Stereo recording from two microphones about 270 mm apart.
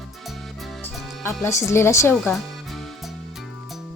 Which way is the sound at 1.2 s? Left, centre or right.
Centre.